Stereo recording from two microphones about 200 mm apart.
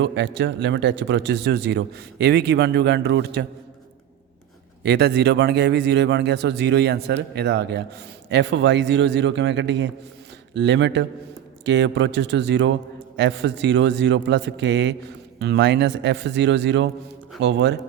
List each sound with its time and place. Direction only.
0.0 s speech: 60° right (ahead or behind)
4.8 s speech: 55° right (ahead or behind)